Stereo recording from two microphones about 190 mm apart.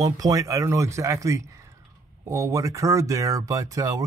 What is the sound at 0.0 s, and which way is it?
A man's voice, 20° right (ahead or behind).